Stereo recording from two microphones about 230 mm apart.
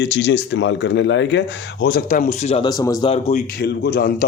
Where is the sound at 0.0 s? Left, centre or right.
Left.